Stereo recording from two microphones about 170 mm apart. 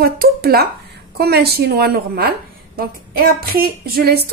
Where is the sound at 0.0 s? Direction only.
65° right (ahead or behind).